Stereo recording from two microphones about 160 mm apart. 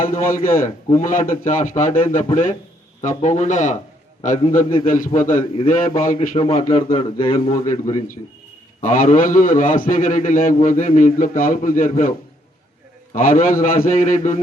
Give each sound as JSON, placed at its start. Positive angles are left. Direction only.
{"t": 0.0, "sound": "a man's voice", "side_deg": 60}
{"t": 6.3, "sound": "a man's voice", "side_deg": 35}
{"t": 8.8, "sound": "a man's voice", "side_deg": 55}
{"t": 13.1, "sound": "a man's voice", "side_deg": 55}